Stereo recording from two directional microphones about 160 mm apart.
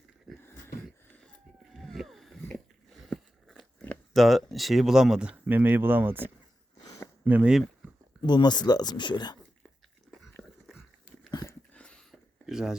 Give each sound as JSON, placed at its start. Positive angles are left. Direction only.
{"t": 0.3, "sound": "a sound", "side_deg": 0}
{"t": 1.7, "sound": "vehicle", "side_deg": 0}
{"t": 2.4, "sound": "biting", "side_deg": 0}
{"t": 4.5, "sound": "speech", "side_deg": 0}
{"t": 6.8, "sound": "a sound", "side_deg": 20}
{"t": 7.3, "sound": "speech", "side_deg": -10}
{"t": 8.3, "sound": "speech", "side_deg": 25}
{"t": 11.3, "sound": "dog", "side_deg": 25}
{"t": 11.7, "sound": "a sound", "side_deg": 5}